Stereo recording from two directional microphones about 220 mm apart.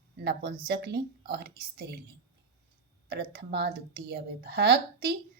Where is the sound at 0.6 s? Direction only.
45° right (ahead or behind).